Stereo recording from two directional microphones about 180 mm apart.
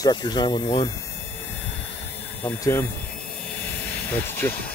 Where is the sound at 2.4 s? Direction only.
10° left (ahead or behind).